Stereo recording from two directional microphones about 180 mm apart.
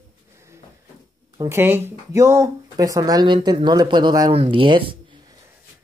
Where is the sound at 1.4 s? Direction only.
15° right (ahead or behind).